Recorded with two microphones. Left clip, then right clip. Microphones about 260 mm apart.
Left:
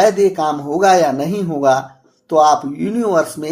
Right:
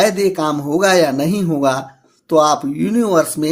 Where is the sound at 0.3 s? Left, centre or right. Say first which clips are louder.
Even; right.